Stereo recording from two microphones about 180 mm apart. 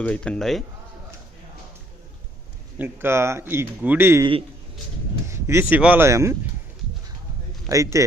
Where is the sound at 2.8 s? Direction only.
10° right (ahead or behind).